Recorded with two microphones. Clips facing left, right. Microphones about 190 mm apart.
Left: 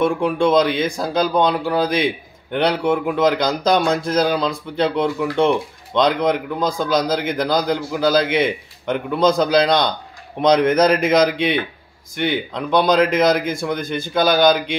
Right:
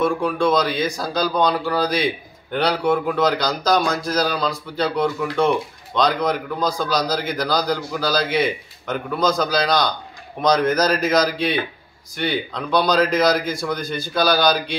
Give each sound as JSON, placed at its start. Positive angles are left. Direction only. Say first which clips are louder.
{"t": 0.0, "sound": "a man's voice", "louder": "left 2 dB", "side_deg": 25}